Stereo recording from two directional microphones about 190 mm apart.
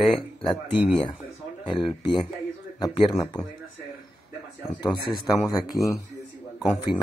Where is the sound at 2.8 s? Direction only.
20° left (ahead or behind).